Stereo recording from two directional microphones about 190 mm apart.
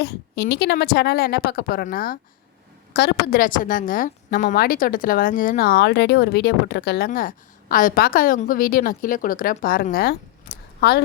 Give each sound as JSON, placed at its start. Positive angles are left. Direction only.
{"t": 0.0, "sound": "a woman's voice", "side_deg": 60}
{"t": 2.9, "sound": "a woman's voice", "side_deg": 60}